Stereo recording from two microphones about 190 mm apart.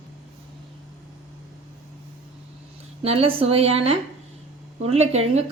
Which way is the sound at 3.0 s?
30° right (ahead or behind).